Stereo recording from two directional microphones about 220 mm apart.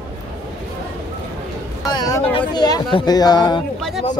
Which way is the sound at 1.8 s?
15° left (ahead or behind).